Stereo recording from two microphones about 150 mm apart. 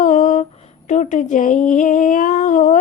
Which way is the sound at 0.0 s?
55° left (ahead or behind).